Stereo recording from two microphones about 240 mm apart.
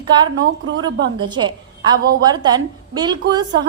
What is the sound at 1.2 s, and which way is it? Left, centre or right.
A woman's voice, centre.